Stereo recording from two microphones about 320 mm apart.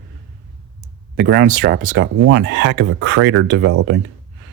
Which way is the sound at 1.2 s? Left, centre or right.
Right.